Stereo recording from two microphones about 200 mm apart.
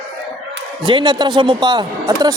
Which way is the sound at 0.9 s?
20° right (ahead or behind).